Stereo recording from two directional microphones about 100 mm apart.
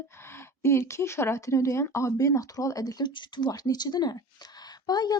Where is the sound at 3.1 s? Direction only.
50° left (ahead or behind).